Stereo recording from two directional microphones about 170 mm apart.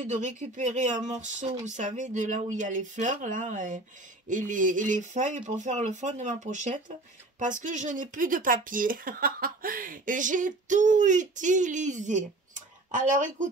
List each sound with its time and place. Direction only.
0.0 s speech: 45° right (ahead or behind)